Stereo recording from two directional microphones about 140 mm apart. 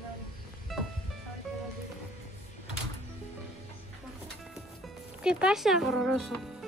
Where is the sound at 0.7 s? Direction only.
Centre (ahead or behind).